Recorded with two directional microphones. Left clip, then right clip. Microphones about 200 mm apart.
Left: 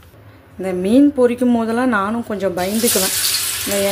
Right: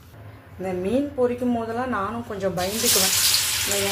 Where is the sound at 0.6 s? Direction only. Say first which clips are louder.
Left 10 dB; 45° left (ahead or behind).